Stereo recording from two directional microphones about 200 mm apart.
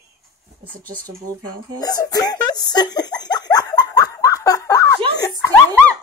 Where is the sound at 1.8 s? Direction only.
20° left (ahead or behind).